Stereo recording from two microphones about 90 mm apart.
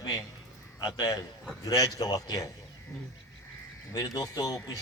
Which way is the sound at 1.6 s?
45° left (ahead or behind).